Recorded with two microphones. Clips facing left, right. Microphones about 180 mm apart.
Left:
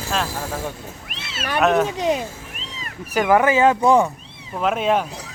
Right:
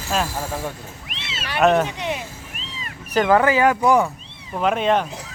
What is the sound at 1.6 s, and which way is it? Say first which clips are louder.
Speech: right 1 dB; centre (ahead or behind).